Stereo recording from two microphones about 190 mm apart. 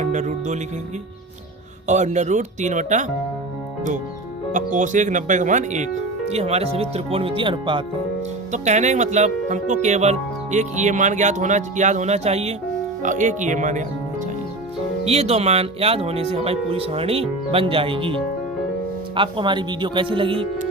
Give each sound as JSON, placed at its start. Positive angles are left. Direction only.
{"t": 0.0, "sound": "music", "side_deg": -40}
{"t": 1.9, "sound": "speech", "side_deg": -40}
{"t": 4.5, "sound": "speech", "side_deg": -40}
{"t": 8.5, "sound": "speech", "side_deg": -40}
{"t": 15.0, "sound": "speech", "side_deg": -35}